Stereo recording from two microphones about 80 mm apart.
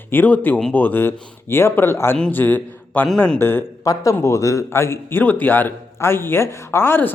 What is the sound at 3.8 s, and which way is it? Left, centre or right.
Speech, left.